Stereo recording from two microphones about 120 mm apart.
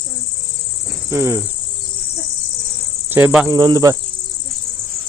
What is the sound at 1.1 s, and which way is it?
Cricket, 20° right (ahead or behind).